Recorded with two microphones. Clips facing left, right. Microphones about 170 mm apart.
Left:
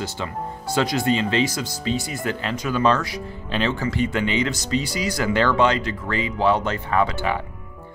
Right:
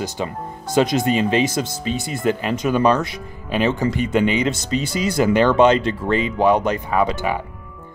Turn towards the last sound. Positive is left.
turn(degrees=-15)  # may be behind; listen again after turning